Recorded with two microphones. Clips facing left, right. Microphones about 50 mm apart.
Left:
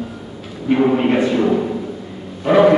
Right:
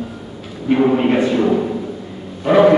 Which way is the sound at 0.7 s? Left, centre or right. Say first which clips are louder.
Right 1 dB; centre.